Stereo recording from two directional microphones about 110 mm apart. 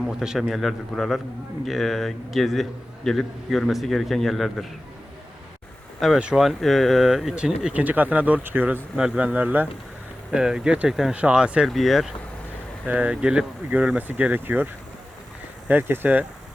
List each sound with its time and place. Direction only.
0.2 s a man's voice: 5° right (ahead or behind)
6.1 s a man's voice: 5° right (ahead or behind)
12.9 s speech: 10° right (ahead or behind)